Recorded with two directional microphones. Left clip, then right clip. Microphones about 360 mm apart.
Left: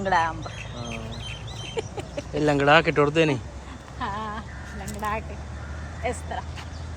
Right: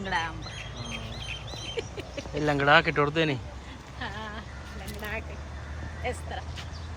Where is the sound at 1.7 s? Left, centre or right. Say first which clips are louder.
Left 5 dB; left.